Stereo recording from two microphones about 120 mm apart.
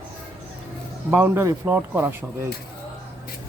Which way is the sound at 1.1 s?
20° right (ahead or behind).